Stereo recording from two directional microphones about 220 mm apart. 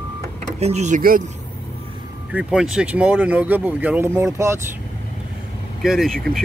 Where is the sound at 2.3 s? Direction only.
5° right (ahead or behind).